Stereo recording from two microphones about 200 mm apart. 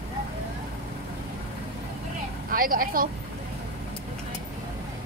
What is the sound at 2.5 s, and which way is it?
Speech, 45° right (ahead or behind).